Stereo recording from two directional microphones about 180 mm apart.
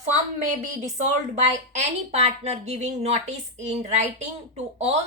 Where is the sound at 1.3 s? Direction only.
40° right (ahead or behind).